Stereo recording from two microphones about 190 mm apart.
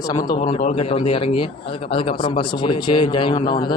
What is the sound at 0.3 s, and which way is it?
A man's voice, 35° left (ahead or behind).